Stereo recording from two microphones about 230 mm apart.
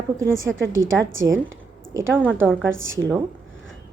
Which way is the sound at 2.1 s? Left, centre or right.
Centre.